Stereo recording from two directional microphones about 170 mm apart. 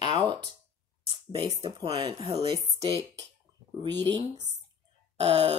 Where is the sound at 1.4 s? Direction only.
30° right (ahead or behind).